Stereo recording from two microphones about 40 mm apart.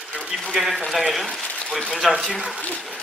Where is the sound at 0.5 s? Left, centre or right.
Centre.